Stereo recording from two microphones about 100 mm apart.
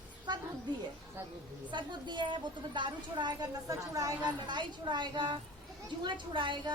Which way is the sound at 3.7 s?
35° right (ahead or behind).